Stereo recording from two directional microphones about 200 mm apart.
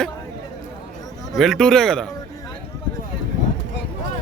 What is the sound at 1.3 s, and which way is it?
Speech, centre (ahead or behind).